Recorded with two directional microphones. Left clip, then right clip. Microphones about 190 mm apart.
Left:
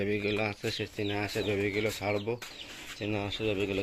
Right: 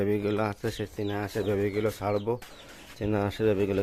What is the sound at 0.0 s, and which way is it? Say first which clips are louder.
Speech: right 3 dB; 20° right (ahead or behind).